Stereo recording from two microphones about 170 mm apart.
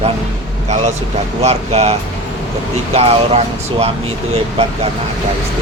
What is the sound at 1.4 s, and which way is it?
Speech, 40° right (ahead or behind).